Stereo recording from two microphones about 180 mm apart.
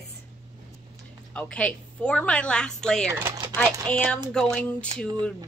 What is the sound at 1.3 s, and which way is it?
A woman's voice, 5° left (ahead or behind).